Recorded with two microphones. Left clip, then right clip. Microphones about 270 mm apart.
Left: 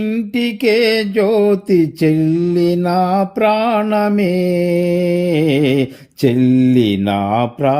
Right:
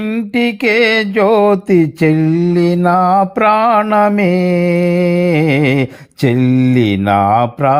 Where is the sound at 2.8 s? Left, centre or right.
Right.